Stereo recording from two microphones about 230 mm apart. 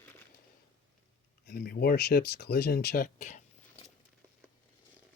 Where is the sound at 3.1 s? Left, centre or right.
Left.